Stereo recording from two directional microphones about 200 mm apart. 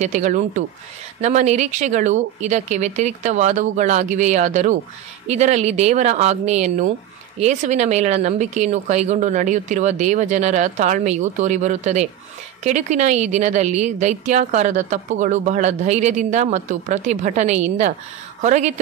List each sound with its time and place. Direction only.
0.0 s a woman's voice: 35° right (ahead or behind)